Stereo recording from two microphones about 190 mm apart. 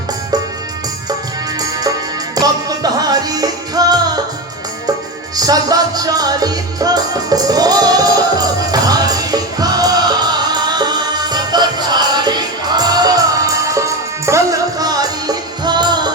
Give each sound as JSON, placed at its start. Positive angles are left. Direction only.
{"t": 2.3, "sound": "music", "side_deg": -20}
{"t": 5.4, "sound": "music", "side_deg": -20}